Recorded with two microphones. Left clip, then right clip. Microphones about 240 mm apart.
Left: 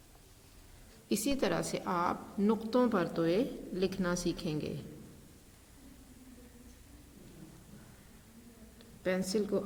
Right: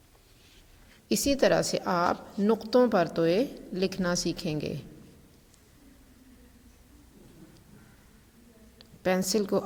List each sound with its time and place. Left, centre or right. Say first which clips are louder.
1.0 s a woman's voice: right 8 dB; right
8.8 s a woman's voice: right 7 dB; right